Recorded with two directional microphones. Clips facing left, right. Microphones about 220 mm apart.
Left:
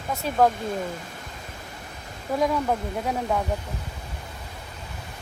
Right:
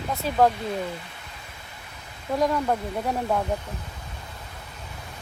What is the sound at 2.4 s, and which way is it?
Speech, centre (ahead or behind).